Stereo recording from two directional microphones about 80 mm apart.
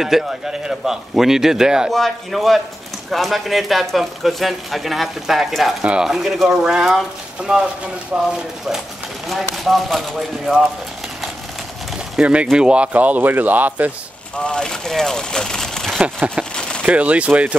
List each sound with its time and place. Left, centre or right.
0.0 s speech: centre
8.1 s speech: centre
9.3 s speech: centre
12.2 s speech: centre
14.3 s speech: centre
16.0 s speech: centre
16.5 s a sound: centre
16.8 s speech: centre